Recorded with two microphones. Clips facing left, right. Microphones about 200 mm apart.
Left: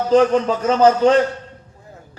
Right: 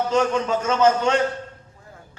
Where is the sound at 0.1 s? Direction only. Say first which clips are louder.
Left 9 dB; 35° left (ahead or behind).